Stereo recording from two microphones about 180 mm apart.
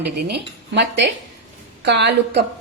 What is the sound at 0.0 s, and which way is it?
Speech, 65° right (ahead or behind).